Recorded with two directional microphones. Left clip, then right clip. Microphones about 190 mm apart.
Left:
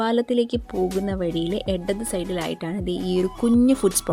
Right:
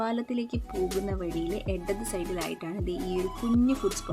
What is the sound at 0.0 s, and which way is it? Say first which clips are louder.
Speech: left 10 dB; 30° left (ahead or behind).